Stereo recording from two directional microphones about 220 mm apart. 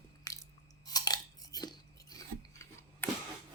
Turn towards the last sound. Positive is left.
turn(degrees=15)  # may be behind; listen again after turning